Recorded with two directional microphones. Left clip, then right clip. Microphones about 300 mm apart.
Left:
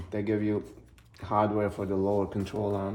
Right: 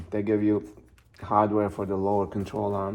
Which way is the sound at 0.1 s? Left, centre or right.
Centre.